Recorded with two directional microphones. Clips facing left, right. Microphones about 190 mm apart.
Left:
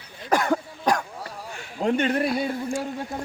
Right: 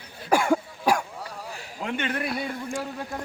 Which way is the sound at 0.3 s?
10° right (ahead or behind).